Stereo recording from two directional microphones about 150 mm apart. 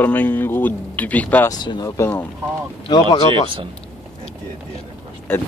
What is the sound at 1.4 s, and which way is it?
Speech, 30° left (ahead or behind).